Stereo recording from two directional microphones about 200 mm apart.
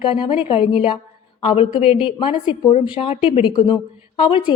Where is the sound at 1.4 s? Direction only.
25° left (ahead or behind).